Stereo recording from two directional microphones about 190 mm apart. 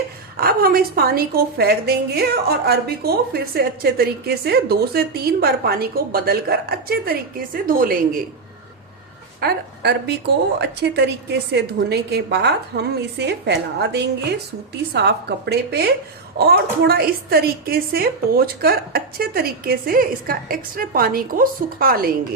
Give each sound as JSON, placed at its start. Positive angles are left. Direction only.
{"t": 0.3, "sound": "a woman's voice", "side_deg": -50}
{"t": 9.4, "sound": "a woman's voice", "side_deg": -55}